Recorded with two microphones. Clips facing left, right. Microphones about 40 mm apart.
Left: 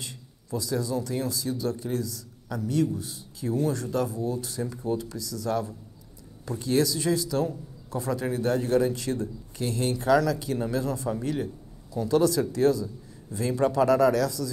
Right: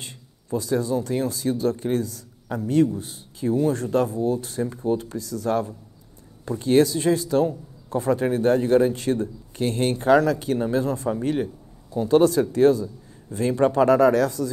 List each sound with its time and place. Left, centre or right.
0.0 s a man's voice: right